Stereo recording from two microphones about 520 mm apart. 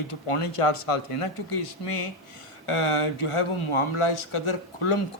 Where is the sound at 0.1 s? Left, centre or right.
Left.